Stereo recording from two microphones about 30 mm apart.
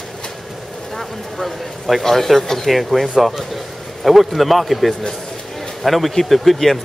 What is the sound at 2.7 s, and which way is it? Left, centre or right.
Speech, centre.